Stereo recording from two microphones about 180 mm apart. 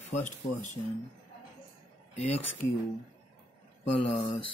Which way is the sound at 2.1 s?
35° left (ahead or behind).